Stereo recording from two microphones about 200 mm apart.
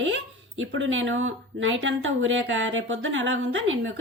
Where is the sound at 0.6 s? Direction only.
75° right (ahead or behind).